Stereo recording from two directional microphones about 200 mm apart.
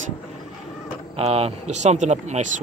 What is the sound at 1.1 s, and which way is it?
Speech, 30° right (ahead or behind).